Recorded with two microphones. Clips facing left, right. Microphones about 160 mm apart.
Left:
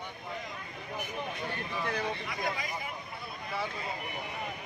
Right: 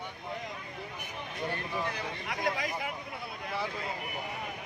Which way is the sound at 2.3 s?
85° right.